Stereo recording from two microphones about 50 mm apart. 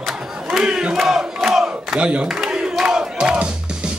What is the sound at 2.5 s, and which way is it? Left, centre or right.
Battle cry, centre.